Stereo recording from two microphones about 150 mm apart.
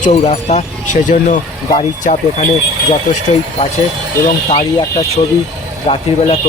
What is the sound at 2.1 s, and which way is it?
Speech, 45° left (ahead or behind).